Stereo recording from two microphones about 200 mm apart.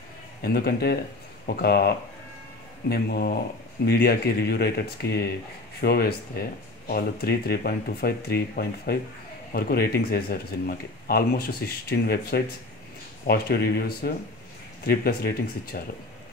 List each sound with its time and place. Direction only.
0.4 s speech: 50° left (ahead or behind)